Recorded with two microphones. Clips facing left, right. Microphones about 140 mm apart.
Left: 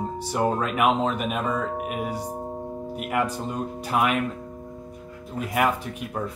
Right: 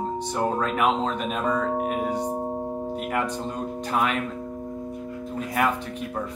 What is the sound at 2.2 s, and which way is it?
Tubular bells, 35° right (ahead or behind).